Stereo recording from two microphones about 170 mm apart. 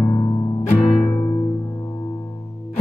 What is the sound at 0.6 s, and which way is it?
Music, 10° left (ahead or behind).